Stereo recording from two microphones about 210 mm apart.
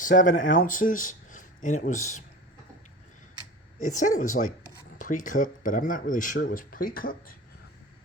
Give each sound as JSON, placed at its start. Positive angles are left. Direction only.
{"t": 0.0, "sound": "speech", "side_deg": 40}
{"t": 3.8, "sound": "speech", "side_deg": 35}